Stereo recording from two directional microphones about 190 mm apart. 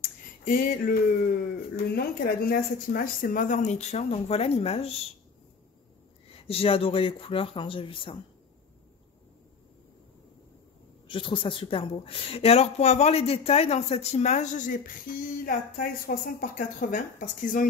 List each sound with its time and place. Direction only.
0.5 s a woman's voice: 50° left (ahead or behind); by 5.0 s 30° left (ahead or behind)
6.4 s speech: 30° left (ahead or behind)
11.1 s a woman's voice: 25° left (ahead or behind); by 17.6 s 45° left (ahead or behind)